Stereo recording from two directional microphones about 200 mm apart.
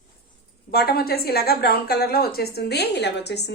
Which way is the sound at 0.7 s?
50° left (ahead or behind).